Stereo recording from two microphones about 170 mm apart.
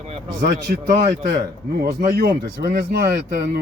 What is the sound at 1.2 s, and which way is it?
A man's voice, 60° right (ahead or behind).